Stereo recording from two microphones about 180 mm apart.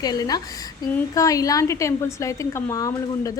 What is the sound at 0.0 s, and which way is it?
A woman's voice, 20° left (ahead or behind).